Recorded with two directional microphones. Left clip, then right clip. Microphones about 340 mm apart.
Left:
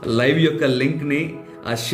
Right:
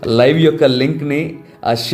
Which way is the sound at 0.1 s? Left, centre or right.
Centre.